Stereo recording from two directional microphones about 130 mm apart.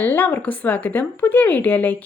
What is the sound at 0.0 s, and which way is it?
A woman's voice, 15° left (ahead or behind).